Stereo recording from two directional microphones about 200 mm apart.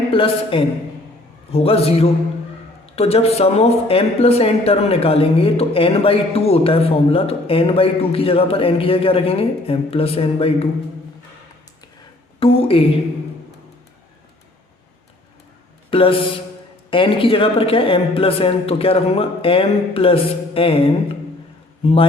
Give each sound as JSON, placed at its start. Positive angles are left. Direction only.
{"t": 0.1, "sound": "a woman's voice", "side_deg": 25}
{"t": 12.4, "sound": "a woman's voice", "side_deg": 30}
{"t": 15.9, "sound": "speech", "side_deg": 25}